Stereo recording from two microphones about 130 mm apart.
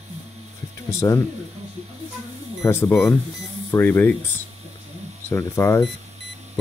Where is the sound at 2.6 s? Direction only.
20° left (ahead or behind).